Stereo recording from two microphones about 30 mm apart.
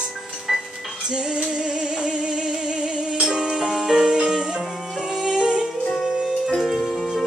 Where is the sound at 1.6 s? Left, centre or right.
Right.